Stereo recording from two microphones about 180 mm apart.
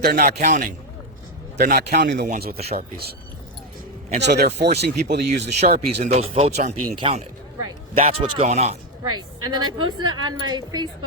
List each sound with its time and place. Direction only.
0.0 s a man's voice: 60° right (ahead or behind)
2.6 s speech: 35° right (ahead or behind)
4.2 s a man's voice: 65° right (ahead or behind)
5.4 s speech: 35° right (ahead or behind)
6.9 s a woman's voice: 30° right (ahead or behind)
9.1 s a woman's voice: 25° right (ahead or behind)